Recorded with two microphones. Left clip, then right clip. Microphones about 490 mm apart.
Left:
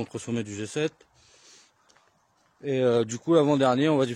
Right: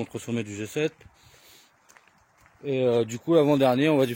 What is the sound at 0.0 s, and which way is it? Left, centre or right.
Speech, left.